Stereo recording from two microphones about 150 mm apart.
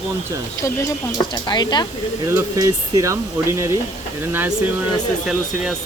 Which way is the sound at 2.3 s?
20° right (ahead or behind).